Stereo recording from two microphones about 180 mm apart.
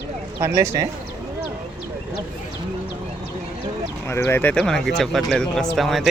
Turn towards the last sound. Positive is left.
turn(degrees=0)  # may be behind; listen again after turning